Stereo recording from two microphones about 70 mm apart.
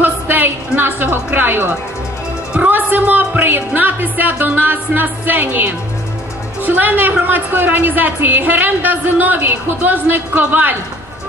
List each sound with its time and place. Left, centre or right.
0.0 s a sound: right
0.7 s a woman's voice: right
2.7 s a woman's voice: right